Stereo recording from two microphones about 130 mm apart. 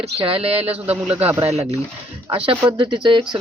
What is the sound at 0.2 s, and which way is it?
Speech, 45° right (ahead or behind).